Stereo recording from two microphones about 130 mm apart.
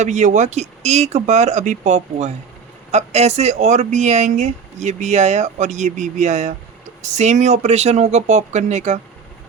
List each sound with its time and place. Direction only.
0.0 s speech: 65° right (ahead or behind)